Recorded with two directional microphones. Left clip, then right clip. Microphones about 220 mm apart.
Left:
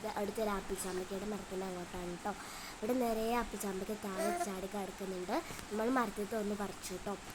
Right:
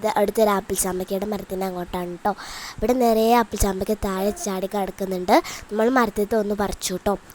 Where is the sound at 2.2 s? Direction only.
40° right (ahead or behind).